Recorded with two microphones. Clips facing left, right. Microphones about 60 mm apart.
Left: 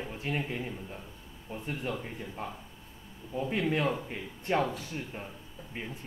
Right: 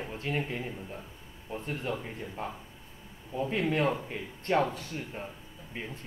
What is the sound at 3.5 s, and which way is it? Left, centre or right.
A man's voice, right.